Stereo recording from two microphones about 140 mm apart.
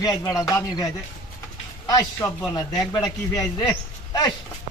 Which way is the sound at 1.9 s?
25° left (ahead or behind).